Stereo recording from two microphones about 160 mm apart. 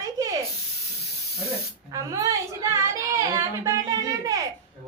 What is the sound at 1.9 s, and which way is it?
A woman's voice, 20° right (ahead or behind).